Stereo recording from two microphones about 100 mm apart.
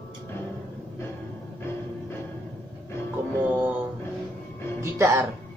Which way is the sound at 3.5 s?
15° right (ahead or behind).